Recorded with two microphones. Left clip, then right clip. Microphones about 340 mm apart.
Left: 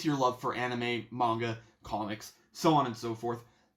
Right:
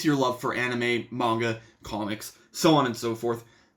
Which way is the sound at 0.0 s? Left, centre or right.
Centre.